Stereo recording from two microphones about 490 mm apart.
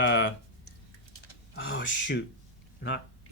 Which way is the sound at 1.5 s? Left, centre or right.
Left.